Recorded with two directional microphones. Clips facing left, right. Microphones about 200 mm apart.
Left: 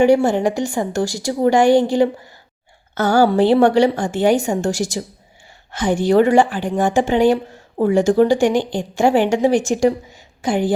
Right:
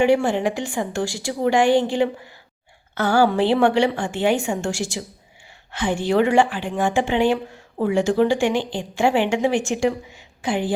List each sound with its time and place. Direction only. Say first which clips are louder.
0.0 s a woman's voice: left 4 dB; 40° left (ahead or behind)